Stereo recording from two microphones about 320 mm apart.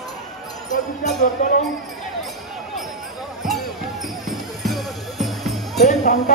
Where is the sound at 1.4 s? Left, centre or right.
Left.